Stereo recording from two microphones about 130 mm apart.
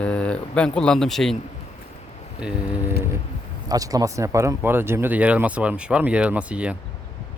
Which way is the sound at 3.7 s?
30° right (ahead or behind).